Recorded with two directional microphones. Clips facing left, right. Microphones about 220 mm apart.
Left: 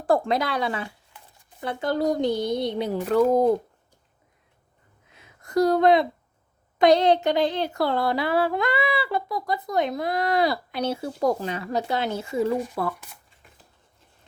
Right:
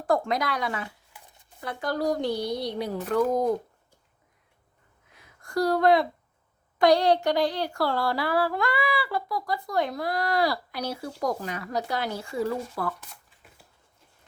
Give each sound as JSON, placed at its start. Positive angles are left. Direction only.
{"t": 0.0, "sound": "speech", "side_deg": 30}
{"t": 5.1, "sound": "a sound", "side_deg": 25}
{"t": 6.7, "sound": "speech", "side_deg": 20}